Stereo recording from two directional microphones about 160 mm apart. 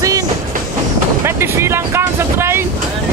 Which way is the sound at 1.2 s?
15° right (ahead or behind).